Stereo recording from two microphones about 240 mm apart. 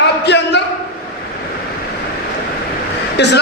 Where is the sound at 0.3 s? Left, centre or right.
Left.